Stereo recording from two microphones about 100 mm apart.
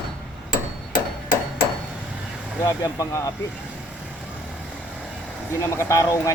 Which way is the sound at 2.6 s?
35° left (ahead or behind).